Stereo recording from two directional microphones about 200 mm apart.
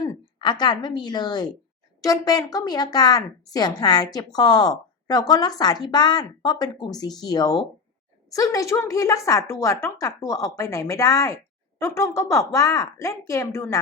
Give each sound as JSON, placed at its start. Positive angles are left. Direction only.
{"t": 0.0, "sound": "a woman's voice", "side_deg": 20}